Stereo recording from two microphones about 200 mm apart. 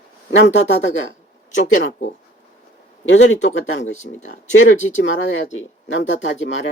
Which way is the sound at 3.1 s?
65° left (ahead or behind).